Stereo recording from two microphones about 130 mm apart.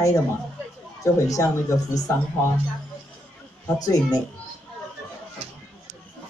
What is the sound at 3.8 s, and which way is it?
Speech, 30° left (ahead or behind).